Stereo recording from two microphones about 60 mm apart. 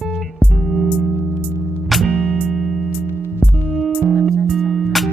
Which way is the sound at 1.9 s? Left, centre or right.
Centre.